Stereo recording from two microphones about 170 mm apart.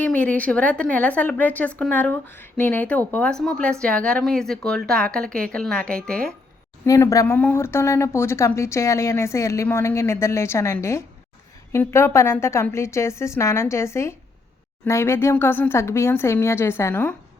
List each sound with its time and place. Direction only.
0.0 s a woman's voice: 10° left (ahead or behind)
6.8 s speech: 20° left (ahead or behind)